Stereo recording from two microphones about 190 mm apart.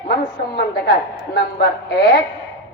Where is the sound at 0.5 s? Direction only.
55° left (ahead or behind).